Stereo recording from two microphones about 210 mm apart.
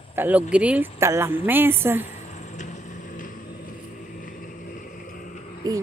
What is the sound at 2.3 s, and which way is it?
Vehicle, 35° left (ahead or behind).